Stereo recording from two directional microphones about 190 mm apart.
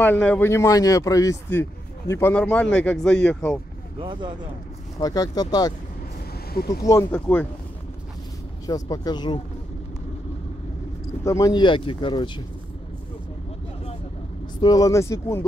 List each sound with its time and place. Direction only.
0.0 s speech: 10° left (ahead or behind)
4.0 s speech: 25° right (ahead or behind)
5.0 s speech: 20° left (ahead or behind)
6.7 s speech: 15° left (ahead or behind)
8.6 s speech: 20° left (ahead or behind)
11.2 s speech: 20° left (ahead or behind)
14.6 s speech: 20° left (ahead or behind)